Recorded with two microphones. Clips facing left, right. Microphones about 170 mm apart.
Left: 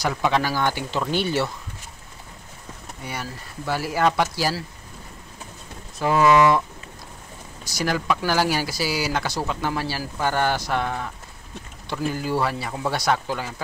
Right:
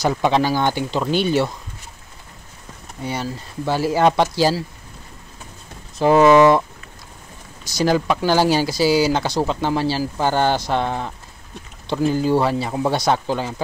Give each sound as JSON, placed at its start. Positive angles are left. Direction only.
{"t": 0.0, "sound": "speech", "side_deg": -25}
{"t": 3.0, "sound": "speech", "side_deg": -25}
{"t": 5.9, "sound": "speech", "side_deg": -30}
{"t": 7.7, "sound": "speech", "side_deg": -30}